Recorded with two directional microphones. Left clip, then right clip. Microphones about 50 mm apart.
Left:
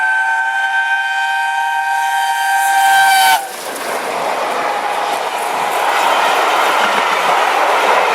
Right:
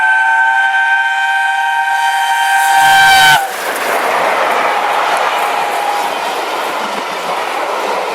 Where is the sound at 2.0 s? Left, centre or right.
Centre.